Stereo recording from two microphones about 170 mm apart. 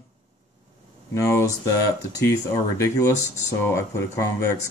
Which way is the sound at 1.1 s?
20° left (ahead or behind).